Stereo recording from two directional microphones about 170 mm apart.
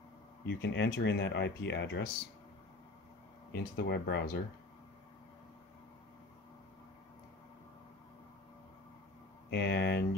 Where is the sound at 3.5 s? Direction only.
70° left (ahead or behind).